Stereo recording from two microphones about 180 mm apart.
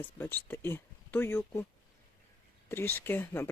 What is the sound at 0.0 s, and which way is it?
Speech, 10° left (ahead or behind).